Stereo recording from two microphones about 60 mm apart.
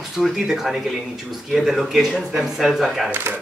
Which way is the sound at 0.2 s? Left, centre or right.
Centre.